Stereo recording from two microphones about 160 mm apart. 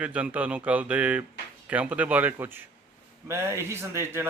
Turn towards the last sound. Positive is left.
turn(degrees=-15)  # may be behind; listen again after turning